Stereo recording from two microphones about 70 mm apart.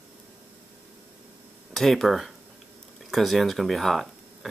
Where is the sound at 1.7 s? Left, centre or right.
Centre.